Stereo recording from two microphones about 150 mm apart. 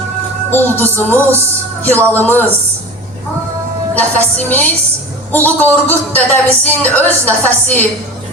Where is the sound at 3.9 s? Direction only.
10° left (ahead or behind).